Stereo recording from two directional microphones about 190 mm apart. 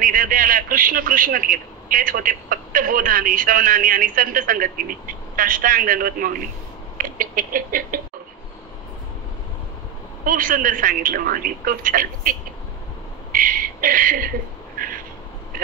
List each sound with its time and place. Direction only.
0.0 s a man's voice: 45° right (ahead or behind)
7.0 s rodents: 45° right (ahead or behind)
10.2 s a man's voice: 45° right (ahead or behind)
13.3 s a sound: 45° right (ahead or behind)